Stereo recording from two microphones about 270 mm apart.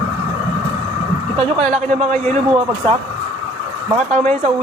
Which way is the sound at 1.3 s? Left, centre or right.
Right.